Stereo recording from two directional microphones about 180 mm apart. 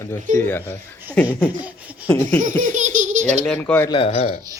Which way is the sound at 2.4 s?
45° right (ahead or behind).